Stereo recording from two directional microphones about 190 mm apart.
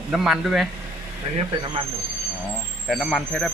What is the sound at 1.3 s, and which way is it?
Speech, 25° right (ahead or behind).